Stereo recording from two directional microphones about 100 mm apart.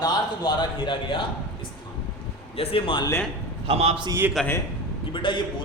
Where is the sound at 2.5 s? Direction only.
70° left (ahead or behind).